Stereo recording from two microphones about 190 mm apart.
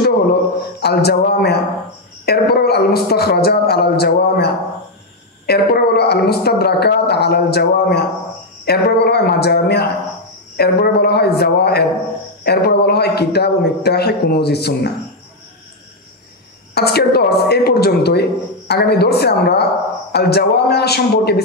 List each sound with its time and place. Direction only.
0.0 s a sound: 55° left (ahead or behind)
2.2 s a man's voice: 55° left (ahead or behind)
5.5 s a man's voice: 55° left (ahead or behind)
16.7 s a man's voice: 55° left (ahead or behind)